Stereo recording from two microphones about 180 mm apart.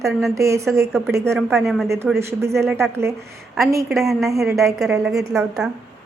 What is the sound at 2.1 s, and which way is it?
Speech, 15° right (ahead or behind).